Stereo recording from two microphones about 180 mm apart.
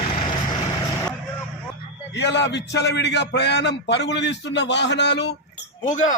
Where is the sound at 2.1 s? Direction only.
75° left (ahead or behind).